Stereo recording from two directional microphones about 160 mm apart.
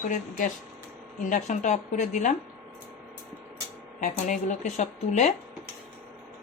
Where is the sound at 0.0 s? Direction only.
55° left (ahead or behind).